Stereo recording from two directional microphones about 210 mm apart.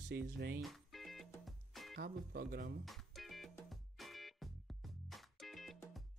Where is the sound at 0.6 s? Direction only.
Centre (ahead or behind).